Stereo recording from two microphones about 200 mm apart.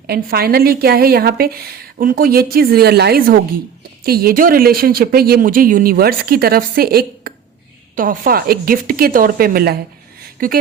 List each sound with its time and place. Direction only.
0.1 s speech: 50° right (ahead or behind)